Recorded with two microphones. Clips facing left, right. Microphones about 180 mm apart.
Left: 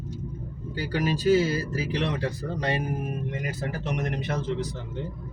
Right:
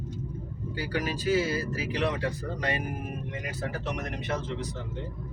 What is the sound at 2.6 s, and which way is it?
Speech, 30° left (ahead or behind).